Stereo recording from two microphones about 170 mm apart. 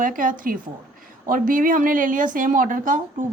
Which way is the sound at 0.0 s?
55° right (ahead or behind).